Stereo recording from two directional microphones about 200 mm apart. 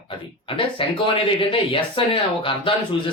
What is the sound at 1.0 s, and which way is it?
Speech, 25° left (ahead or behind).